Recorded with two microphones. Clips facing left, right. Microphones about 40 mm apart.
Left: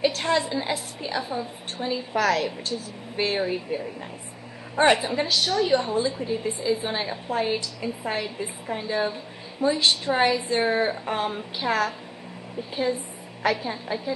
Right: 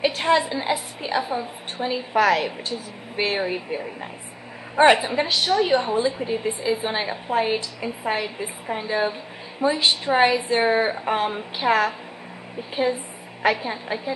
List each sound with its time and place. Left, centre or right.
0.0 s a woman's voice: centre
13.4 s a woman's voice: centre